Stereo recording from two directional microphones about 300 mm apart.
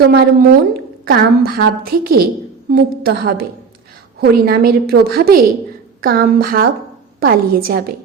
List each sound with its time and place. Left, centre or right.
0.0 s a woman's voice: right